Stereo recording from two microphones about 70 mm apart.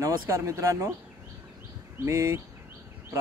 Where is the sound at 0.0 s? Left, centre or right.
Right.